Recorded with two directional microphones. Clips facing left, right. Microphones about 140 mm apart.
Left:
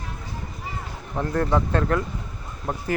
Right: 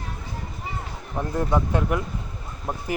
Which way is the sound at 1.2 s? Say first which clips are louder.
Left 1 dB; 15° right (ahead or behind).